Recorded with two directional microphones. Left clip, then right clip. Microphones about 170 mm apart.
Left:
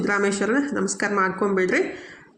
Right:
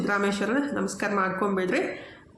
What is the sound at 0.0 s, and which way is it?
Speech, 20° left (ahead or behind).